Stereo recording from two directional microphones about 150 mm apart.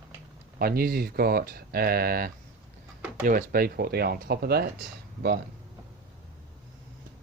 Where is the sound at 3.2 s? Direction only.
75° right (ahead or behind); by 4.7 s 90° right.